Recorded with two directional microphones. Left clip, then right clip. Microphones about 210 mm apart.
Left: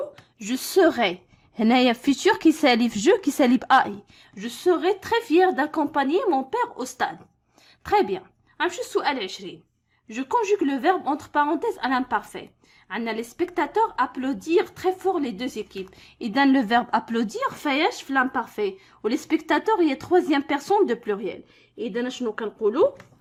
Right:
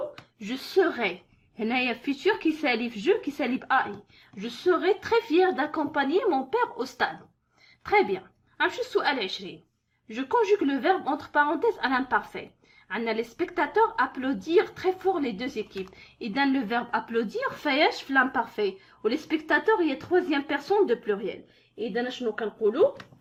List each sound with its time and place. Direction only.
0.3 s speech: 40° left (ahead or behind)
4.4 s a woman's voice: 35° left (ahead or behind)